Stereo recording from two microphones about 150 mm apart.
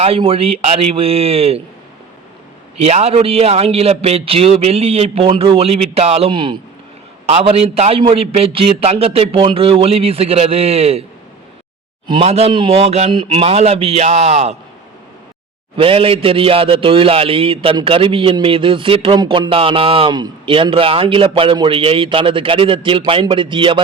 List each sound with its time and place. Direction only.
0.0 s a man's voice: 40° right (ahead or behind)
2.8 s a man's voice: 45° right (ahead or behind)
12.0 s speech: 35° right (ahead or behind)
15.7 s a man's voice: 40° right (ahead or behind)